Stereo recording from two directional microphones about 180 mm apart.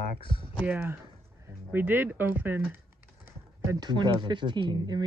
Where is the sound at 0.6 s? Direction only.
10° right (ahead or behind).